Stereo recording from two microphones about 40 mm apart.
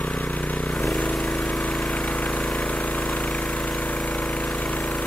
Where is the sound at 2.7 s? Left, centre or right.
Left.